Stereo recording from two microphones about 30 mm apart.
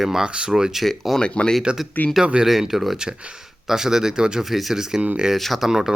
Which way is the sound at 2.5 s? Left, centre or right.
Centre.